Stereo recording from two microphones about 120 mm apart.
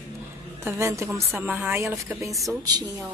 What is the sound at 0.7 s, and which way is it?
Speech, 20° right (ahead or behind).